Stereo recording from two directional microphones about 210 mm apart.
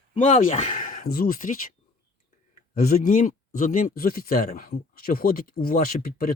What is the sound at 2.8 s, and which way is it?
Speech, 40° left (ahead or behind).